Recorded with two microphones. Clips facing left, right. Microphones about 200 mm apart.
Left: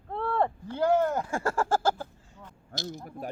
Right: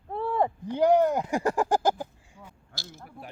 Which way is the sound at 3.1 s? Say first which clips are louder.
Left 7 dB; 45° left (ahead or behind).